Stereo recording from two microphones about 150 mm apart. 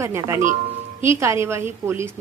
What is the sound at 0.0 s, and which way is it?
A woman's voice, 20° right (ahead or behind).